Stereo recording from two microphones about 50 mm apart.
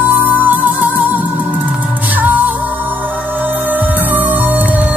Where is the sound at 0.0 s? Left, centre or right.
Right.